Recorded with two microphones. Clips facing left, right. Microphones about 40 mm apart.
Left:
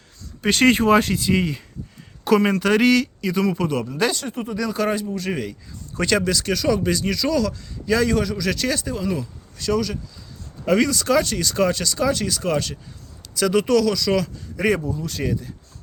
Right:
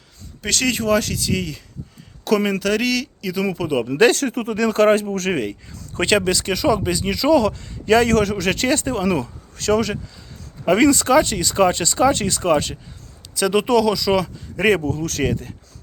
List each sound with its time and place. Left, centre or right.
0.6 s speech: left
2.2 s speech: centre
3.8 s speech: right
4.1 s speech: right
4.5 s speech: right
5.0 s speech: right
5.3 s speech: right
7.9 s speech: right
10.7 s speech: right
14.8 s speech: right
15.2 s speech: right